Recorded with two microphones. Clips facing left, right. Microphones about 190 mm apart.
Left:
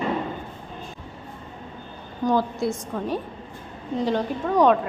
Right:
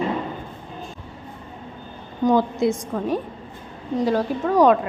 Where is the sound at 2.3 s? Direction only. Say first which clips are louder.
Right 4 dB; 20° right (ahead or behind).